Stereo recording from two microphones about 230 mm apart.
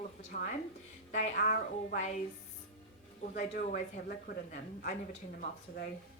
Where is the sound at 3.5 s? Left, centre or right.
Left.